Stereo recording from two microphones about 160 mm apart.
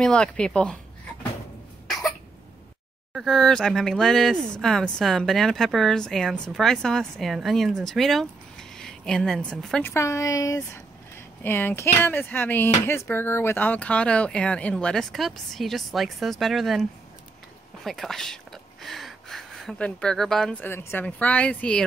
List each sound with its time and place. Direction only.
0.0 s speech: 5° left (ahead or behind)
3.1 s speech: centre (ahead or behind)
9.8 s speech: 20° left (ahead or behind); by 16.8 s centre (ahead or behind)
17.8 s a sound: centre (ahead or behind)
20.6 s speech: 15° left (ahead or behind)